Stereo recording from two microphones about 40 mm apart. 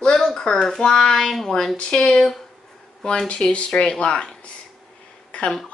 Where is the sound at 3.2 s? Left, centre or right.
Left.